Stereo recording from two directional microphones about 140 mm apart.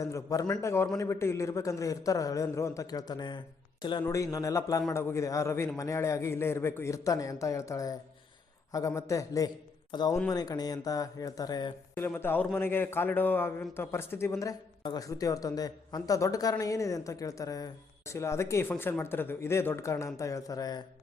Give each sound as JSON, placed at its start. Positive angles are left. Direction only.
{"t": 0.0, "sound": "a man's voice", "side_deg": 25}
{"t": 4.0, "sound": "a man's voice", "side_deg": 20}
{"t": 9.0, "sound": "a man's voice", "side_deg": 25}
{"t": 11.9, "sound": "a man's voice", "side_deg": 15}